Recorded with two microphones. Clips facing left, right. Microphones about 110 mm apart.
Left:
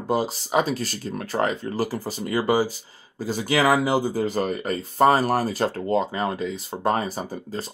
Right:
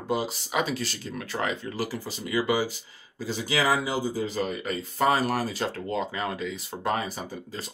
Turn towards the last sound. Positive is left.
turn(degrees=40)  # may be behind; listen again after turning